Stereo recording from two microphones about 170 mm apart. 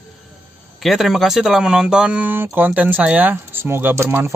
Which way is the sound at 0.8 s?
Centre (ahead or behind).